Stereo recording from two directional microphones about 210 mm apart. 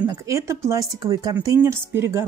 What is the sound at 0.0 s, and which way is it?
A woman's voice, 15° right (ahead or behind).